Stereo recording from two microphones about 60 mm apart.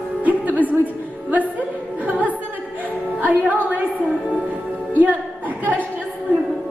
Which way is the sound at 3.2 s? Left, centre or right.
Right.